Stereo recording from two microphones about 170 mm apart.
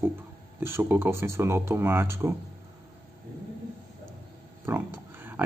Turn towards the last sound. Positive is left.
turn(degrees=-15)  # may be behind; listen again after turning